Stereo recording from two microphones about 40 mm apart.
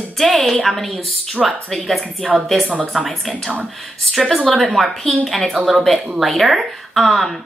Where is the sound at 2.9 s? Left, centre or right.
Centre.